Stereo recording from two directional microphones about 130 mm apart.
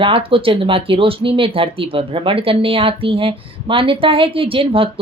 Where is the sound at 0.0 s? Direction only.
45° right (ahead or behind).